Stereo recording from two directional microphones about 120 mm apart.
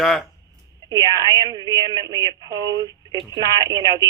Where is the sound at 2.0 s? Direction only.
30° right (ahead or behind).